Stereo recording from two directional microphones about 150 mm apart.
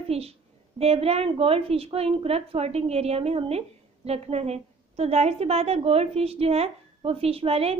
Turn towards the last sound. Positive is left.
turn(degrees=-40)  # may be behind; listen again after turning